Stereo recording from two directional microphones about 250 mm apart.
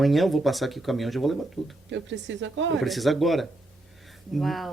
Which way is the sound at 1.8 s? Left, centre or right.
Right.